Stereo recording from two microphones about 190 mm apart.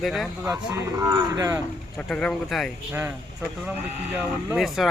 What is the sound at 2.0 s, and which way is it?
Speech, 5° left (ahead or behind).